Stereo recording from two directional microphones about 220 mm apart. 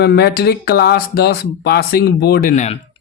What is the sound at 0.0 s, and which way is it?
Speech, 45° left (ahead or behind).